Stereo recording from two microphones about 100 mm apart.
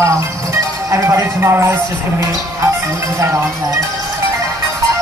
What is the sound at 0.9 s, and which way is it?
Speech, 30° right (ahead or behind).